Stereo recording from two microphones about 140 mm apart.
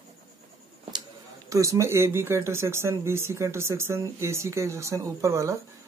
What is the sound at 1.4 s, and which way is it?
Speech, 20° right (ahead or behind).